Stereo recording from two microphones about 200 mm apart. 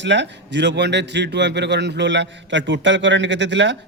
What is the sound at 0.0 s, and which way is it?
A man's voice, 60° right (ahead or behind).